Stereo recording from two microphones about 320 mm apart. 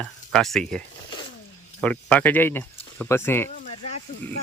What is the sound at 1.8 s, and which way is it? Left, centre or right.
Speech, centre.